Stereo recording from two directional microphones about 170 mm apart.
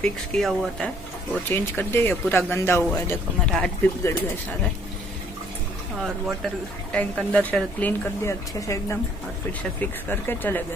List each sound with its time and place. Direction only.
0.0 s speech: centre (ahead or behind)
6.0 s speech: centre (ahead or behind)